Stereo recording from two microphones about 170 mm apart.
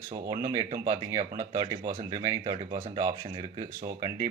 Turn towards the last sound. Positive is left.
turn(degrees=-20)  # may be behind; listen again after turning